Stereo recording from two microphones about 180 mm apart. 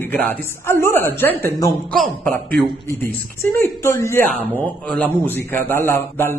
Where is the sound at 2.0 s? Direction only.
Centre (ahead or behind).